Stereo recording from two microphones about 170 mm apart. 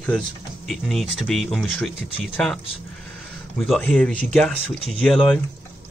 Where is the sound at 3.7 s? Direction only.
5° left (ahead or behind).